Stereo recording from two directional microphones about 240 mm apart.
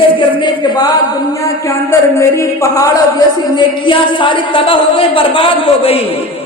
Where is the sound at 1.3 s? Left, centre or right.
Centre.